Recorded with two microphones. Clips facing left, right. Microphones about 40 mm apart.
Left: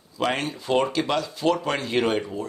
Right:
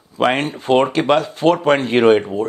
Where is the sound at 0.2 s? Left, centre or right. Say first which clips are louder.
Right 8 dB; right.